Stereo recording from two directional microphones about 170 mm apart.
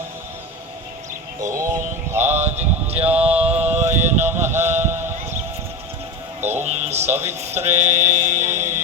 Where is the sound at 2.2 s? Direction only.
40° right (ahead or behind).